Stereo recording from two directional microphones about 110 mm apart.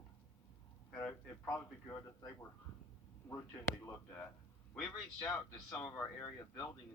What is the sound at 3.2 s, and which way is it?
Speech, 20° left (ahead or behind).